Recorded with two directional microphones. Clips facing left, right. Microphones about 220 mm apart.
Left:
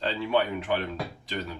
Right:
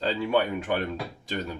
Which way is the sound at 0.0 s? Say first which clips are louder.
Right 1 dB; 45° right (ahead or behind).